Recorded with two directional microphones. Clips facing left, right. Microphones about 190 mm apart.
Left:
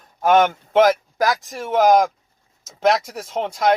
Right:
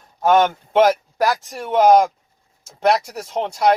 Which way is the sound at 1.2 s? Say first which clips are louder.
Right 3 dB; centre (ahead or behind).